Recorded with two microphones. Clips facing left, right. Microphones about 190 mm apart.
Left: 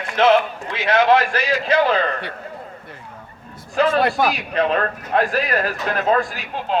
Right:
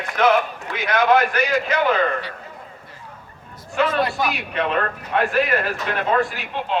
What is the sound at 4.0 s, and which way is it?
Speech, 55° left (ahead or behind).